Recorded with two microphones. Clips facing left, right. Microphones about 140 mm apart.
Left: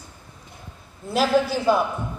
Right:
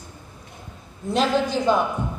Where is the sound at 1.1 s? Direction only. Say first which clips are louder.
Left 1 dB; 5° left (ahead or behind).